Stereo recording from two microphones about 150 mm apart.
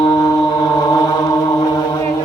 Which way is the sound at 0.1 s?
25° left (ahead or behind).